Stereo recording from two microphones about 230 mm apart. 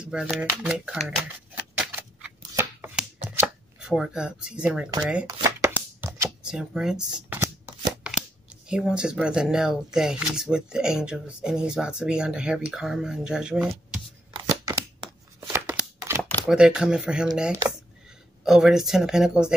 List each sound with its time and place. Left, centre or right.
0.0 s speech: centre
0.7 s a sound: centre
5.2 s chopping: centre
7.1 s speech: centre
8.6 s speech: centre
14.3 s a sound: centre
16.3 s speech: centre
18.4 s speech: centre